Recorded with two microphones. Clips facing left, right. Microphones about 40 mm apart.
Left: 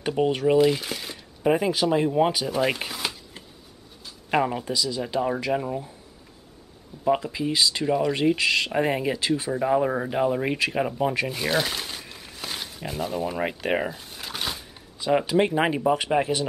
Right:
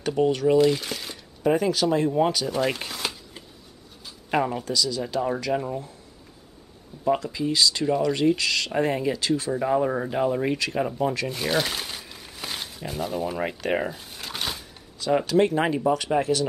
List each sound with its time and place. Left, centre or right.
0.0 s speech: left; by 1.2 s centre
1.4 s speech: centre
7.1 s speech: centre
13.9 s a sound: centre
15.0 s speech: centre